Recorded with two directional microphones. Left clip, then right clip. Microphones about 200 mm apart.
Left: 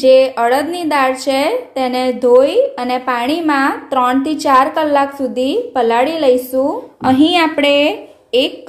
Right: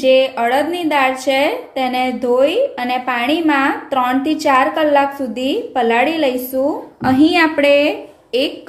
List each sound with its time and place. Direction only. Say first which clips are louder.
0.0 s a woman's voice: left 3 dB; 25° left (ahead or behind)